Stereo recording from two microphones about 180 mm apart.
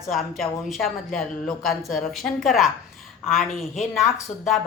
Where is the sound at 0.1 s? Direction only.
Centre (ahead or behind).